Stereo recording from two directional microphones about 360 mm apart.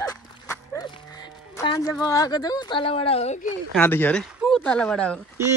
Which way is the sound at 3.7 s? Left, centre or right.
Centre.